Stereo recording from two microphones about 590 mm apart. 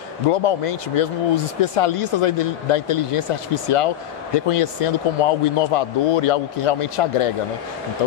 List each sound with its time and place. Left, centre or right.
0.3 s speech: left